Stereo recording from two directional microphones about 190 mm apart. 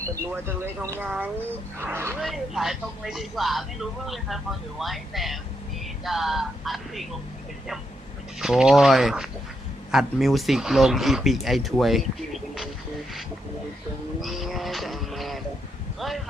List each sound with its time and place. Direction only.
0.1 s speech: 10° right (ahead or behind)
2.2 s speech: centre (ahead or behind)
8.4 s speech: 5° right (ahead or behind)
14.2 s vehicle: centre (ahead or behind)
16.0 s a sound: centre (ahead or behind)